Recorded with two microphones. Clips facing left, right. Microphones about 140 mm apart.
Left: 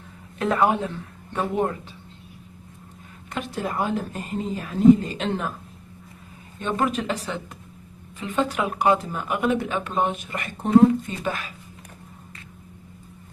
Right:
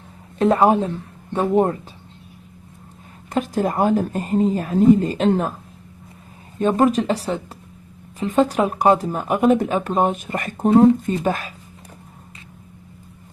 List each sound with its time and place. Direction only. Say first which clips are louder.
0.4 s speech: right 6 dB; 30° right (ahead or behind)
3.3 s a woman's voice: right 8 dB; 45° right (ahead or behind)
6.6 s speech: right 8 dB; 40° right (ahead or behind)